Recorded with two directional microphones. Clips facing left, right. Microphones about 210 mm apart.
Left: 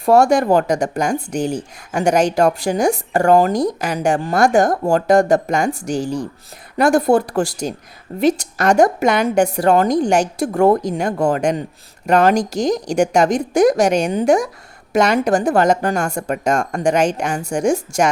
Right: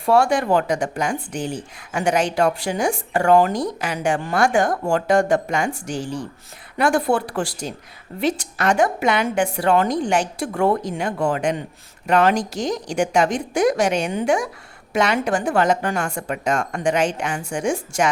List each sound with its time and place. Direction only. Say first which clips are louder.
0.0 s speech: left 5 dB; 40° left (ahead or behind)